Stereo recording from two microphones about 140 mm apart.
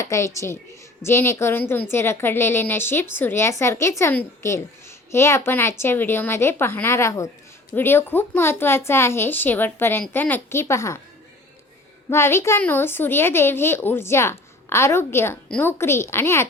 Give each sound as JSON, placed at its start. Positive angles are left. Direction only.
{"t": 0.0, "sound": "a child's voice", "side_deg": 20}
{"t": 12.1, "sound": "a woman's voice", "side_deg": 20}